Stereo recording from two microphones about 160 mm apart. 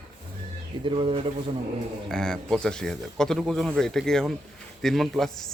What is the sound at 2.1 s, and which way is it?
Speech, 5° left (ahead or behind).